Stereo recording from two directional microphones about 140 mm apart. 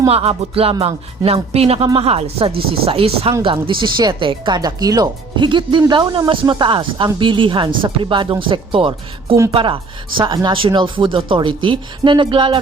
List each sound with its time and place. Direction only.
0.1 s speech: 45° right (ahead or behind)